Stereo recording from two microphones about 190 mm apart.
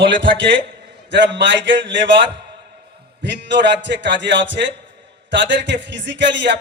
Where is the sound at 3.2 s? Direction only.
65° right (ahead or behind).